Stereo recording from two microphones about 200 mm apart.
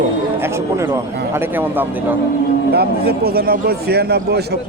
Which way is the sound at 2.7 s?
50° right (ahead or behind).